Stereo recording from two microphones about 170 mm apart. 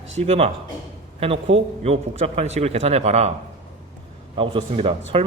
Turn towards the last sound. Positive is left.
turn(degrees=-35)  # may be behind; listen again after turning